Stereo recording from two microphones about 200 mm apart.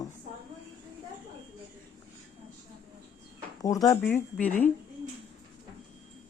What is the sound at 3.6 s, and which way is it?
Speech, 15° left (ahead or behind).